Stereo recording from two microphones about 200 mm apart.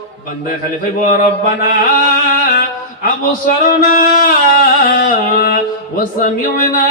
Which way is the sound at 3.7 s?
45° left (ahead or behind).